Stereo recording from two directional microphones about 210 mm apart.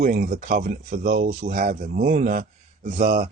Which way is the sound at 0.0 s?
40° right (ahead or behind).